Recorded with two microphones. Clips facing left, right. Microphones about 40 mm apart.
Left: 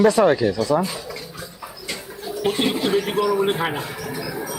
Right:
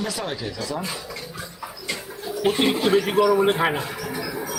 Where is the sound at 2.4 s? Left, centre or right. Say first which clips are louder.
Right 1 dB; centre.